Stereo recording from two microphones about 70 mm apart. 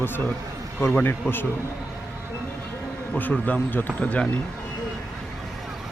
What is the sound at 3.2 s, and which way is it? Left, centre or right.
Speech, left.